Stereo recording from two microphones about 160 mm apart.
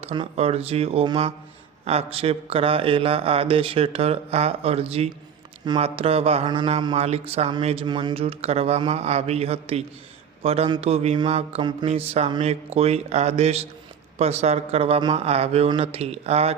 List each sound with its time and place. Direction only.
0.0 s speech: 35° right (ahead or behind)